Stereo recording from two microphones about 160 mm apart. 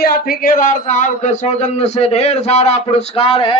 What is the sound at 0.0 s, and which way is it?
Speech, 65° left (ahead or behind).